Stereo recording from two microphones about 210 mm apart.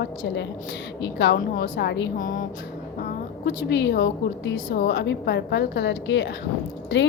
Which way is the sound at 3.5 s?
55° left (ahead or behind).